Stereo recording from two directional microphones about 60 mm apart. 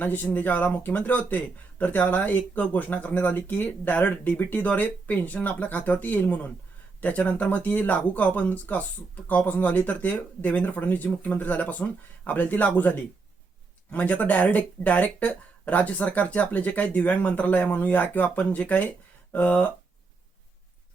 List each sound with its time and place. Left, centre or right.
0.0 s speech: left